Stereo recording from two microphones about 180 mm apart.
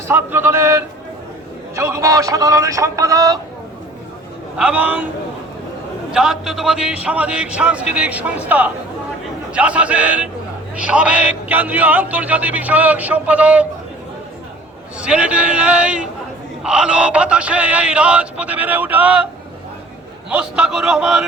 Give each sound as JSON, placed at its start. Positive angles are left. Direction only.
{"t": 0.1, "sound": "a man's voice", "side_deg": -10}
{"t": 4.5, "sound": "a man's voice", "side_deg": -10}
{"t": 6.1, "sound": "a man's voice", "side_deg": -5}
{"t": 15.0, "sound": "a man's voice", "side_deg": -5}
{"t": 20.3, "sound": "a man's voice", "side_deg": -5}